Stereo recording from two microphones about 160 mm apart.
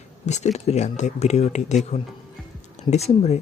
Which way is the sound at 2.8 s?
45° left (ahead or behind).